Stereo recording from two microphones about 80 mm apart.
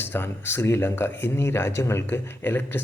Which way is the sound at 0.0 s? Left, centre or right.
Left.